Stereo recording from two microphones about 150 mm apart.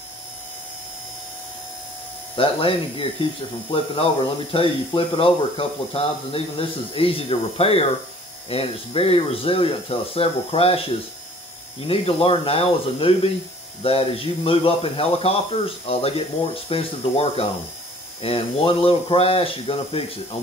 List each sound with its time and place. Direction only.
2.3 s speech: 35° left (ahead or behind)